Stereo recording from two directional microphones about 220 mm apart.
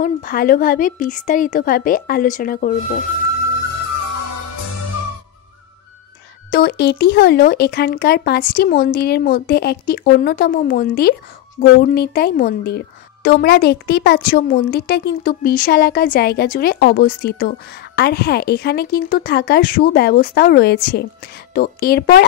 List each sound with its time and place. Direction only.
0.0 s a woman's voice: 40° left (ahead or behind)
6.5 s a woman's voice: 45° left (ahead or behind)